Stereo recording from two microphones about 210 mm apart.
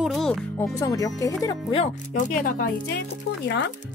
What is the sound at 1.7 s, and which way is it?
Speech, 35° left (ahead or behind).